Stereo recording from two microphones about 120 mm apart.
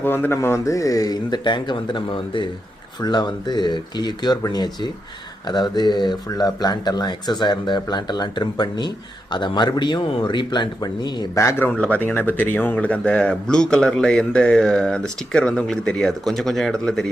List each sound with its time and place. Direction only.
0.0 s speech: 15° left (ahead or behind); by 11.4 s 35° left (ahead or behind)
11.4 s speech: 20° left (ahead or behind)